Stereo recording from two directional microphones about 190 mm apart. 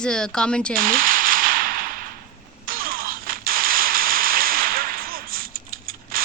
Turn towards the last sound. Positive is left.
turn(degrees=-50)  # may be behind; listen again after turning